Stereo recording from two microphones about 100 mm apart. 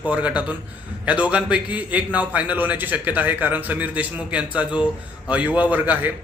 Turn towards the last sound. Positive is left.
turn(degrees=-20)  # may be behind; listen again after turning